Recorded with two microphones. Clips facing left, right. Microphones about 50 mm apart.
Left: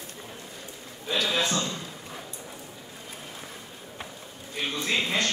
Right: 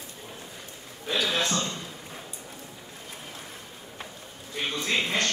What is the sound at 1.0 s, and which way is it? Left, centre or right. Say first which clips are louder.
Speech: even; right.